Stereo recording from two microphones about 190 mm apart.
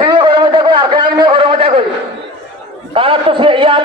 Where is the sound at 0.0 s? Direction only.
25° right (ahead or behind).